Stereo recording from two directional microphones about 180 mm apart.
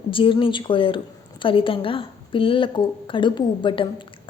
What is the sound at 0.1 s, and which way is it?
A woman's voice, 30° left (ahead or behind).